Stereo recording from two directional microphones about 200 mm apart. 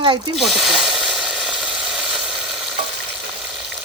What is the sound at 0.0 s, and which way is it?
Speech, 25° right (ahead or behind).